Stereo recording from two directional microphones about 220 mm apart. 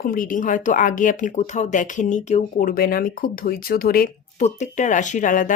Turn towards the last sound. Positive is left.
turn(degrees=35)  # may be behind; listen again after turning